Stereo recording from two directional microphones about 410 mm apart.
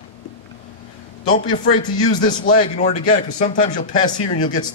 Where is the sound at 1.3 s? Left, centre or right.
Left.